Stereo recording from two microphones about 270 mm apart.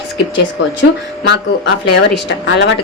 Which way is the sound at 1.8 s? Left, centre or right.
Left.